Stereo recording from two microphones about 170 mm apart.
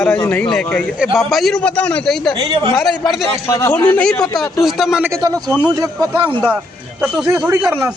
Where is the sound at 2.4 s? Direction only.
30° right (ahead or behind).